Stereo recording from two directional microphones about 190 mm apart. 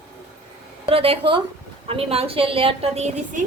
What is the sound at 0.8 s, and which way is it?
A woman's voice, 30° right (ahead or behind).